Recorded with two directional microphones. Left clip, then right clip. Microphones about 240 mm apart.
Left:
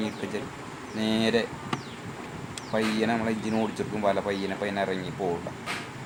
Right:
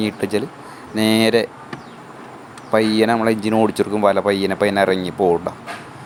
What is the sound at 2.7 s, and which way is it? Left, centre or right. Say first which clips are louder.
Speech: right 11 dB; right.